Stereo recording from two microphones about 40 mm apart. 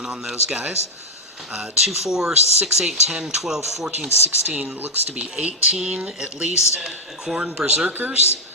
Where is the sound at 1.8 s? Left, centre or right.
Centre.